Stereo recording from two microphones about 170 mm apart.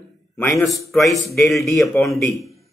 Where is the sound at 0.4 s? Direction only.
Centre (ahead or behind).